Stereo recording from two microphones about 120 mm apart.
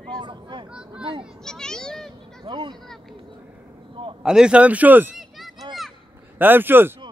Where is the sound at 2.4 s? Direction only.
45° right (ahead or behind).